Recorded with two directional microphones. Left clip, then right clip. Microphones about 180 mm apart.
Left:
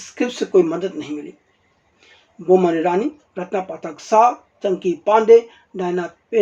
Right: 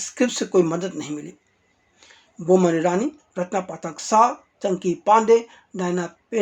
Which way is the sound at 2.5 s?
30° right (ahead or behind).